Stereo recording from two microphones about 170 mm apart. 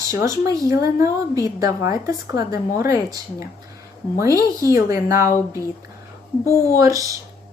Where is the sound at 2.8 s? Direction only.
20° right (ahead or behind).